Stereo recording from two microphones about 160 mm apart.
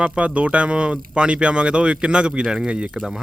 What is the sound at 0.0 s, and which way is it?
A man's voice, 5° right (ahead or behind).